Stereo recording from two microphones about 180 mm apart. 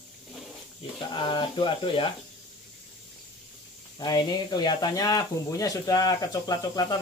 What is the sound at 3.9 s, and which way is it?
Speech, 25° left (ahead or behind).